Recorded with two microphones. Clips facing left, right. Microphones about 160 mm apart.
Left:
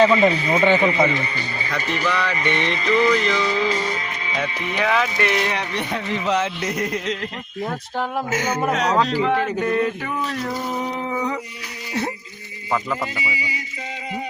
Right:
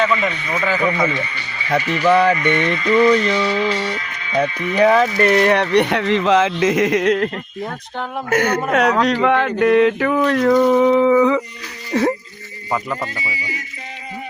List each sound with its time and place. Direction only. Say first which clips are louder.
0.0 s speech: left 4 dB; 30° left (ahead or behind)
2.0 s music: right 11 dB; 45° right (ahead or behind)
2.4 s music: right 4 dB; 25° left (ahead or behind)
2.9 s a sound: right 4 dB; 35° right (ahead or behind)
4.8 s speech: right 8 dB; 35° right (ahead or behind); by 7.3 s 60° right (ahead or behind)
7.6 s speech: left 3 dB; 5° left (ahead or behind)
8.3 s speech: right 6 dB; 60° right (ahead or behind)
8.7 s a sound: right 4 dB; 60° right (ahead or behind); by 12.1 s 90° right
12.7 s speech: right 1 dB; centre (ahead or behind)
13.1 s speech: left 1 dB; 15° left (ahead or behind)